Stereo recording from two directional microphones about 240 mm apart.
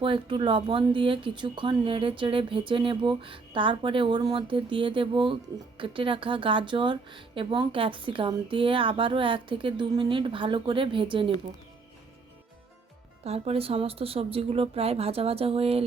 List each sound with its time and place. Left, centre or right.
0.0 s speech: right
13.2 s speech: right